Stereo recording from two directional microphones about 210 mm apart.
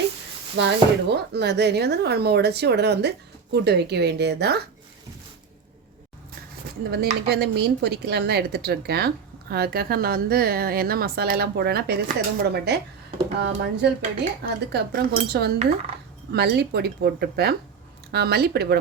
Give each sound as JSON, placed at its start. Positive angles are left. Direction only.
{"t": 0.5, "sound": "a woman's voice", "side_deg": -55}
{"t": 6.9, "sound": "a woman's voice", "side_deg": -50}